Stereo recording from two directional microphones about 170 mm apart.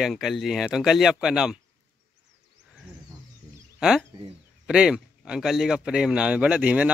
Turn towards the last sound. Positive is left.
turn(degrees=-10)  # may be behind; listen again after turning